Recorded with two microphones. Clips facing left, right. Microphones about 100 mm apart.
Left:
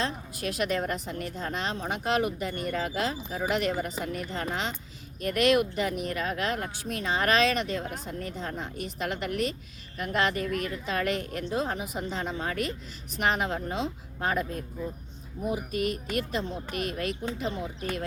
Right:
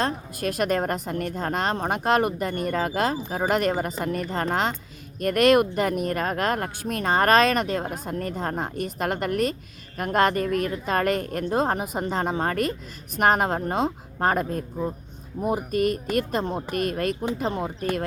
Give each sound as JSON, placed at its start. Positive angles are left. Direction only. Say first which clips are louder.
{"t": 0.0, "sound": "speech", "louder": "right 5 dB", "side_deg": -50}